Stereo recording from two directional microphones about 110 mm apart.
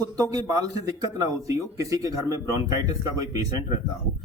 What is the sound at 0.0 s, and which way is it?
Speech, 35° right (ahead or behind).